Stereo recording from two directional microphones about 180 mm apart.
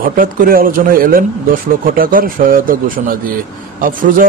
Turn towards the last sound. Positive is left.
turn(degrees=-50)  # may be behind; listen again after turning